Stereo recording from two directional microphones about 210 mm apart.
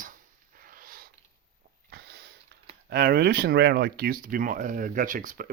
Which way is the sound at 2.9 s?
45° right (ahead or behind).